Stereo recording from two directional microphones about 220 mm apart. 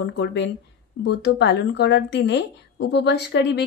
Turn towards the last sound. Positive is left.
turn(degrees=50)  # may be behind; listen again after turning